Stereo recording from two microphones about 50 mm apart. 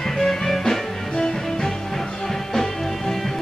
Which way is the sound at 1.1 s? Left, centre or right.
Centre.